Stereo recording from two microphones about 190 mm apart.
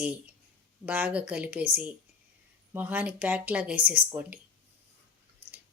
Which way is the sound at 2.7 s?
10° right (ahead or behind).